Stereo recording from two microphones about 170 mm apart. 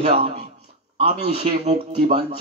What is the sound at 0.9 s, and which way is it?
Speech, 35° right (ahead or behind).